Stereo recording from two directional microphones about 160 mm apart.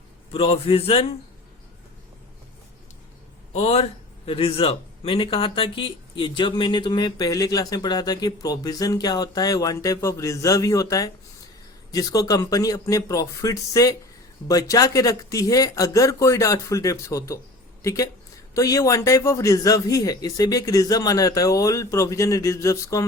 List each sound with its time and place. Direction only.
0.3 s a man's voice: 35° left (ahead or behind)
3.5 s a man's voice: 40° left (ahead or behind); by 23.0 s 20° left (ahead or behind)